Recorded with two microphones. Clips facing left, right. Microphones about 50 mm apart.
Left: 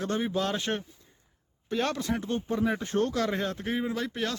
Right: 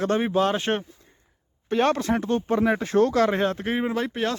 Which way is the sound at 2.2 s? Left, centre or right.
Right.